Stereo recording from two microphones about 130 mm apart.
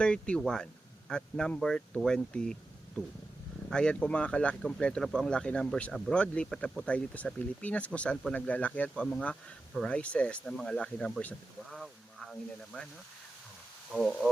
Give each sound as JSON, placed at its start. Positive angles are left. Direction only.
{"t": 0.0, "sound": "speech", "side_deg": 5}
{"t": 3.7, "sound": "speech", "side_deg": 5}
{"t": 13.9, "sound": "speech", "side_deg": 0}